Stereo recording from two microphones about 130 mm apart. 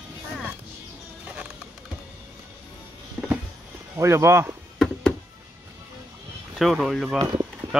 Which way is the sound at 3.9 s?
20° right (ahead or behind).